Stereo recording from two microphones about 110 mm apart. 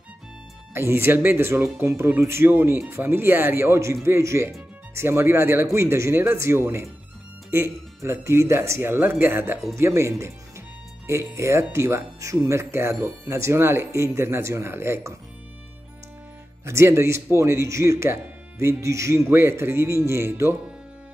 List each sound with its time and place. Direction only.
0.7 s speech: 20° right (ahead or behind)
16.6 s speech: 25° right (ahead or behind)